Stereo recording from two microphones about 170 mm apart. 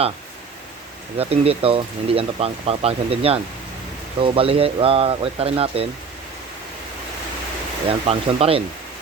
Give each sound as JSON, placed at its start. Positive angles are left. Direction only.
{"t": 1.2, "sound": "speech", "side_deg": -35}
{"t": 7.9, "sound": "speech", "side_deg": -35}